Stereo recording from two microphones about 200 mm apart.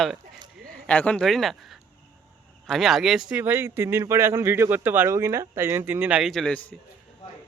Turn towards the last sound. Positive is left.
turn(degrees=0)  # may be behind; listen again after turning